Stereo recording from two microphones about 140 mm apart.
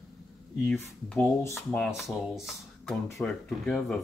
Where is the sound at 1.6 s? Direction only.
Centre (ahead or behind).